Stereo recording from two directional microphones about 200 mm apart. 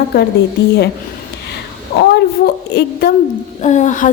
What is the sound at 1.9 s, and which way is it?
A woman's voice, 50° left (ahead or behind).